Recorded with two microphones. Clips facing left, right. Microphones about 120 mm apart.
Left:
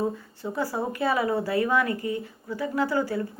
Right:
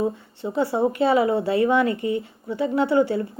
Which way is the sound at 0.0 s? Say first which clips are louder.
Right 3 dB; 25° right (ahead or behind).